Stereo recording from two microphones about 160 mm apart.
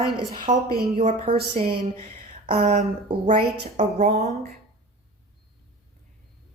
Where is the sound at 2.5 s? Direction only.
40° right (ahead or behind).